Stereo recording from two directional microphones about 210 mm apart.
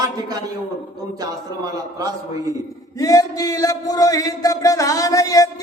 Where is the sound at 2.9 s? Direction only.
15° left (ahead or behind).